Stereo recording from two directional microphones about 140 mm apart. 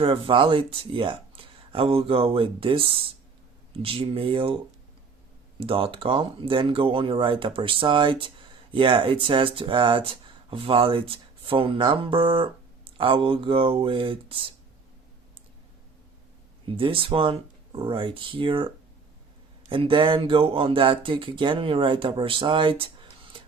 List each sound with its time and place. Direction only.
0.0 s speech: 40° right (ahead or behind)
5.5 s speech: 40° right (ahead or behind)
16.6 s speech: 40° right (ahead or behind)
19.7 s speech: 40° right (ahead or behind)